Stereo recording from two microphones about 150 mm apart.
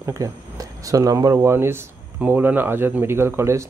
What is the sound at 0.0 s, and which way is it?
Speech, 20° right (ahead or behind).